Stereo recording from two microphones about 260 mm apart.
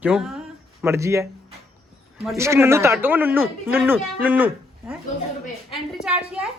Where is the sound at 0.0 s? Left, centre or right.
Centre.